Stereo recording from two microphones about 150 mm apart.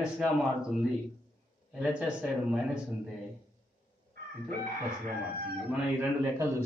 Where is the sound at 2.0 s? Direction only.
5° right (ahead or behind).